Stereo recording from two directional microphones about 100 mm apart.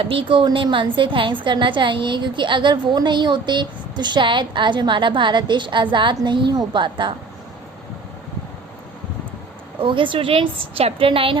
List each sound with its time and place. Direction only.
0.0 s a woman's voice: 65° right (ahead or behind)
9.8 s a woman's voice: 55° right (ahead or behind)